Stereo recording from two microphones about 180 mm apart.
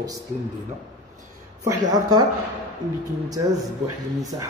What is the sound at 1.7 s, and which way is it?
Speech, 20° right (ahead or behind).